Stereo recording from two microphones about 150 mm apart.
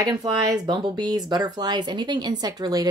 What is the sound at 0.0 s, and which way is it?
A woman's voice, 25° right (ahead or behind).